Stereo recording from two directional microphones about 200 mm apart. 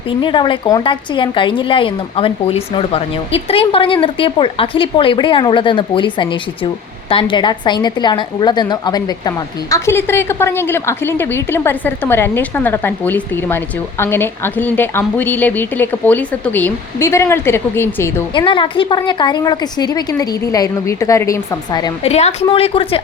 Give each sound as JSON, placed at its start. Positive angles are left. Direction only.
{"t": 0.2, "sound": "a woman's voice", "side_deg": 25}
{"t": 18.3, "sound": "a woman's voice", "side_deg": 25}
{"t": 22.1, "sound": "a woman's voice", "side_deg": 30}